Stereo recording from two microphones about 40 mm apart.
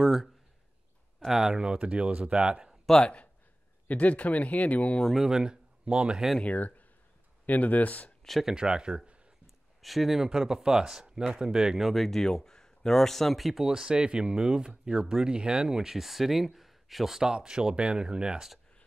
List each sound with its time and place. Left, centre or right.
0.0 s speech: centre
1.8 s speech: right
3.9 s speech: left
5.3 s speech: centre
6.4 s speech: left
8.2 s a sound: centre
8.5 s speech: right
9.8 s speech: centre
11.9 s speech: centre
13.7 s speech: centre
17.3 s speech: right